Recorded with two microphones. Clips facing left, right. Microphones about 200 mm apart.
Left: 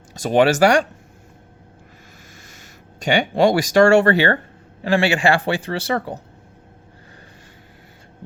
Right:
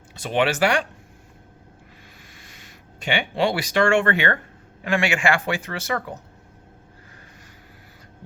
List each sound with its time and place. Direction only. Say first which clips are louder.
0.1 s speech: left 6 dB; 40° left (ahead or behind)
2.3 s a man's voice: left 3 dB; 45° left (ahead or behind)